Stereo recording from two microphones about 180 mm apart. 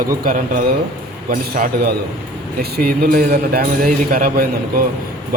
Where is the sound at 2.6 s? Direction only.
60° right (ahead or behind).